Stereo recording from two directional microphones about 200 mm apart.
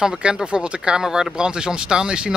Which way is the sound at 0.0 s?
5° right (ahead or behind).